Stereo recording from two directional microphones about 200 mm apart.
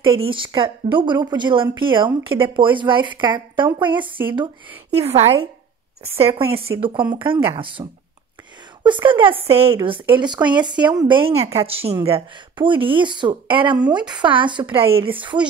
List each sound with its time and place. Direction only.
0.0 s a woman's voice: 25° right (ahead or behind)
7.2 s speech: 10° right (ahead or behind)
7.5 s speech: 25° right (ahead or behind)